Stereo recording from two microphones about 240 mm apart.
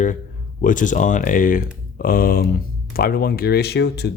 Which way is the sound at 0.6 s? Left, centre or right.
Left.